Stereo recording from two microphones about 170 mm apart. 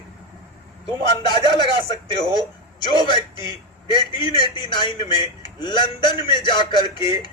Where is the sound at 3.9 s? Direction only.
25° left (ahead or behind).